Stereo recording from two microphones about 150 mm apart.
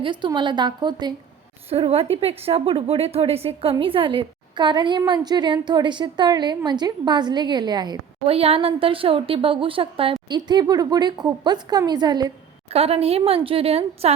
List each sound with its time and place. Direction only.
0.0 s a woman's voice: 30° right (ahead or behind)
1.7 s a woman's voice: 40° right (ahead or behind)
8.3 s a woman's voice: 40° right (ahead or behind)
12.7 s a woman's voice: 40° right (ahead or behind)